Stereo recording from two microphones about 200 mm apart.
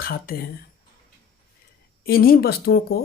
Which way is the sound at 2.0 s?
50° left (ahead or behind).